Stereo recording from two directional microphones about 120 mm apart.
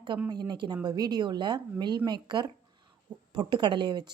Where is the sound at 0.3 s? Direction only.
35° right (ahead or behind).